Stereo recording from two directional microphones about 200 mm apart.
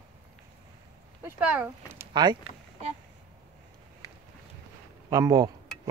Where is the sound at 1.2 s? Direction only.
10° right (ahead or behind).